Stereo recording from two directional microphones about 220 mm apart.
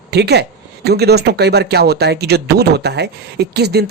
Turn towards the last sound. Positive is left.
turn(degrees=-50)  # may be behind; listen again after turning